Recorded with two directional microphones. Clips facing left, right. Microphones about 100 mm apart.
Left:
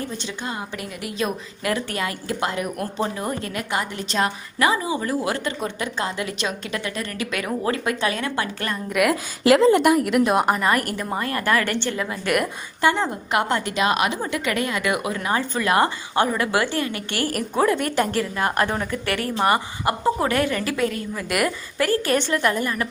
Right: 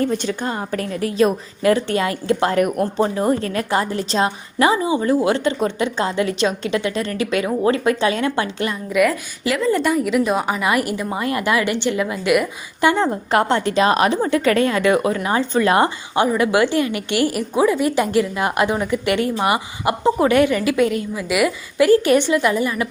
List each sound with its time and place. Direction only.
0.2 s a woman's voice: 40° right (ahead or behind)
2.5 s speech: 55° right (ahead or behind)
2.7 s a woman's voice: 30° right (ahead or behind)
8.7 s a woman's voice: centre (ahead or behind)
10.6 s a woman's voice: 10° right (ahead or behind)
13.0 s a woman's voice: 35° right (ahead or behind); by 17.3 s 15° right (ahead or behind)
17.7 s a woman's voice: 5° right (ahead or behind)
21.2 s a woman's voice: 5° right (ahead or behind)
21.8 s a woman's voice: 15° right (ahead or behind)